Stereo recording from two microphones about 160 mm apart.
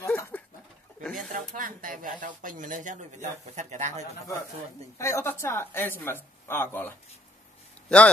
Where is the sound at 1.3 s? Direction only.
60° right (ahead or behind).